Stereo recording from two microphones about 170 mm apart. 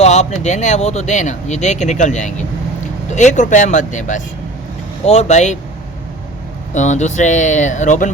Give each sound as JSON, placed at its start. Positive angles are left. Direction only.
{"t": 0.0, "sound": "speech", "side_deg": 40}
{"t": 6.7, "sound": "speech", "side_deg": 45}